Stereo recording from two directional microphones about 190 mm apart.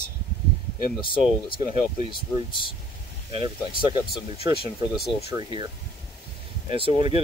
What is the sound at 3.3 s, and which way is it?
Speech, 25° right (ahead or behind).